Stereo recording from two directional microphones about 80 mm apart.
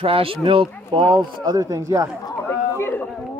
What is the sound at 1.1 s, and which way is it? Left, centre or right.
Speech, right.